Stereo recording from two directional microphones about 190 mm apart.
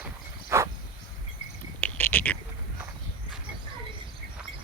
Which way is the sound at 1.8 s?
10° left (ahead or behind).